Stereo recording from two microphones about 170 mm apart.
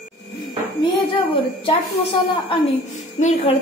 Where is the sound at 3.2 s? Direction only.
40° left (ahead or behind).